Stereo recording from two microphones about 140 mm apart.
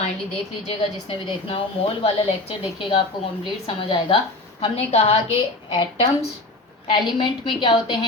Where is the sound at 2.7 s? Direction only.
35° left (ahead or behind).